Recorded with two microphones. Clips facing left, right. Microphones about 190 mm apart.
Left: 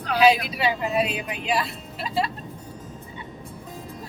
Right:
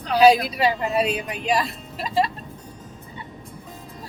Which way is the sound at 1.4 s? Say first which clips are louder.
Right 3 dB; 40° right (ahead or behind).